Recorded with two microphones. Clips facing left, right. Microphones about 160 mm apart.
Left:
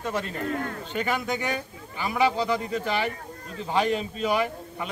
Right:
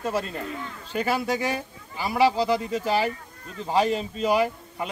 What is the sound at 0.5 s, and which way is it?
Speech, 55° left (ahead or behind).